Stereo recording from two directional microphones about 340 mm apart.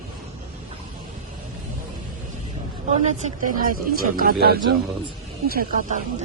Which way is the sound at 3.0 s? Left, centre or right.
Right.